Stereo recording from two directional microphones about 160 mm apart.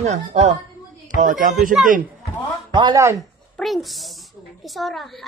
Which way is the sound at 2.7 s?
25° right (ahead or behind).